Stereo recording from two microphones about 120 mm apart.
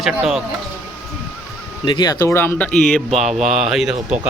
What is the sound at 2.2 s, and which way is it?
Speech, 20° left (ahead or behind).